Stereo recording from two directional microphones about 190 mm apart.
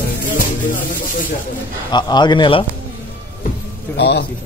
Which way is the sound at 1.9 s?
25° left (ahead or behind).